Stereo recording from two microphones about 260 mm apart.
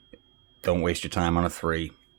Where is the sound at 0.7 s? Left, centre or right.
Right.